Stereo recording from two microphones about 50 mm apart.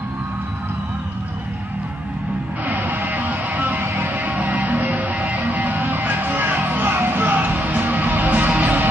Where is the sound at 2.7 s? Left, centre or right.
Right.